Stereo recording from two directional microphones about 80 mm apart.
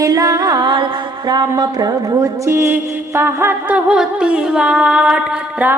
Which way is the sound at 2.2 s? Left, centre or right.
Right.